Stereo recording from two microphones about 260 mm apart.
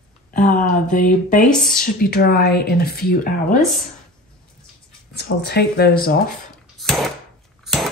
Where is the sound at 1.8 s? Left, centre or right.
Left.